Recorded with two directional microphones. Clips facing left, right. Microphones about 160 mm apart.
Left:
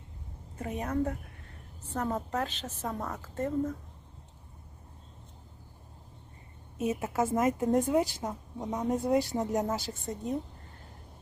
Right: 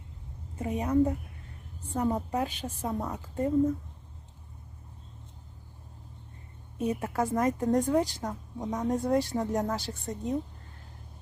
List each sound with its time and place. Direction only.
0.6 s a woman's voice: 10° right (ahead or behind)
6.7 s a woman's voice: 5° left (ahead or behind)
7.0 s a woman's voice: 20° left (ahead or behind)
8.6 s a woman's voice: centre (ahead or behind)